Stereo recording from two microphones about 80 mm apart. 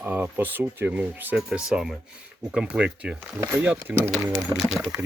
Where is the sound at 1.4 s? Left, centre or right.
Centre.